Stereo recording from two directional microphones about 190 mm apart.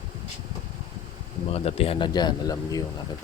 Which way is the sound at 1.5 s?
30° left (ahead or behind).